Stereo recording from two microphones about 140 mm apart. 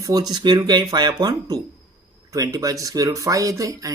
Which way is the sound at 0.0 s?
25° right (ahead or behind).